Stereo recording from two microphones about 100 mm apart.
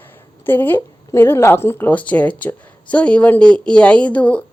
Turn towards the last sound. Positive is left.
turn(degrees=15)  # may be behind; listen again after turning